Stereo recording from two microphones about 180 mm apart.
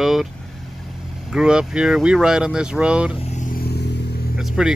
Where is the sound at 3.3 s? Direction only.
55° left (ahead or behind).